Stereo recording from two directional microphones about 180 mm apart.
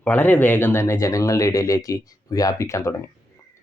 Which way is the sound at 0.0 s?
10° left (ahead or behind).